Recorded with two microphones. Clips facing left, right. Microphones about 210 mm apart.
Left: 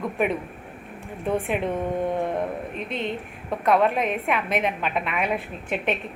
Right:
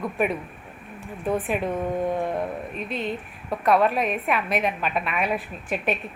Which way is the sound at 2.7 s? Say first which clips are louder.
Right 1 dB; 25° left (ahead or behind).